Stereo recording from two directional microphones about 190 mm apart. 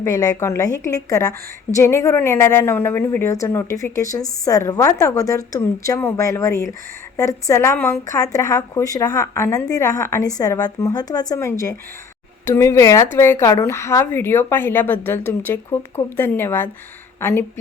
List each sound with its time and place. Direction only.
0.0 s a woman's voice: 20° left (ahead or behind)